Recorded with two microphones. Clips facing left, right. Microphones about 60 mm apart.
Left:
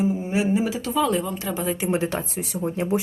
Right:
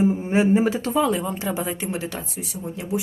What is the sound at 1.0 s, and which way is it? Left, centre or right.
Speech, centre.